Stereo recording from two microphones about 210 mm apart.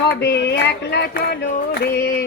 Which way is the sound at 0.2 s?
55° left (ahead or behind).